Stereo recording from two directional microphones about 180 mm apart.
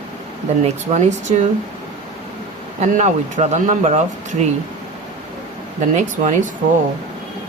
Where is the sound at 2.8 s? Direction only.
40° right (ahead or behind).